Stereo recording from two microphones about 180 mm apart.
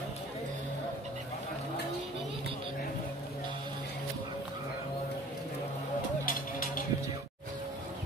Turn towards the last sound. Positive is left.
turn(degrees=50)  # may be behind; listen again after turning